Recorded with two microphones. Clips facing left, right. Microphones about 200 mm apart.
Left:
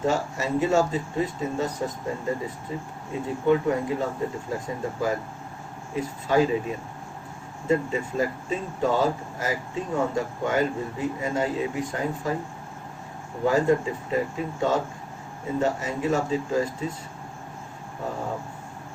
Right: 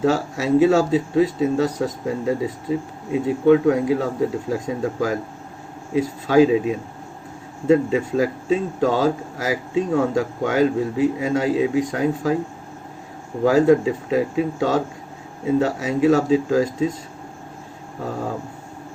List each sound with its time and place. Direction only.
0.0 s speech: 90° right
13.4 s speech: 90° right